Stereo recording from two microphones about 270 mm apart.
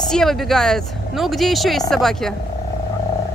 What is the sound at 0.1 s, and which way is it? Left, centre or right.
Speech, centre.